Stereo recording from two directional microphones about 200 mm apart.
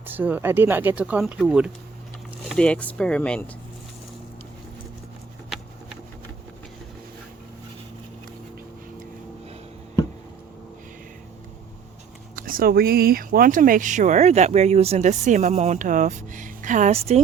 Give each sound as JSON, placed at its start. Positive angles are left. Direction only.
{"t": 0.0, "sound": "speech", "side_deg": -10}
{"t": 5.5, "sound": "a sound", "side_deg": 0}
{"t": 12.4, "sound": "speech", "side_deg": -45}